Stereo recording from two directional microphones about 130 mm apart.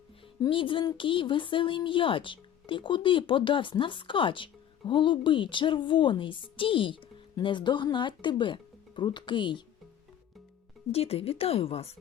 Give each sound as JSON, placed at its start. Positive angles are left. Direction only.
{"t": 0.4, "sound": "a woman's voice", "side_deg": 40}
{"t": 10.9, "sound": "speech", "side_deg": 50}